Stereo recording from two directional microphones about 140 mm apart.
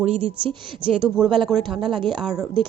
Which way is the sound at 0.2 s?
40° right (ahead or behind).